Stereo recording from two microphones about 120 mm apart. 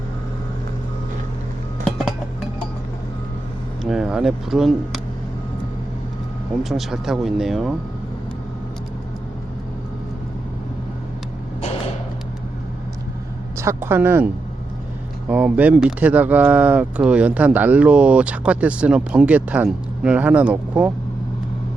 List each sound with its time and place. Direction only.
3.8 s speech: 5° right (ahead or behind)
6.6 s speech: centre (ahead or behind)
13.8 s speech: 20° right (ahead or behind)
15.3 s speech: 10° right (ahead or behind)